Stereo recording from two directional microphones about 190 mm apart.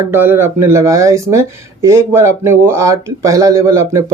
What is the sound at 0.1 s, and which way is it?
Speech, 10° right (ahead or behind).